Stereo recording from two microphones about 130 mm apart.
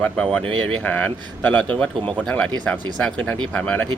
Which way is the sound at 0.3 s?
10° left (ahead or behind).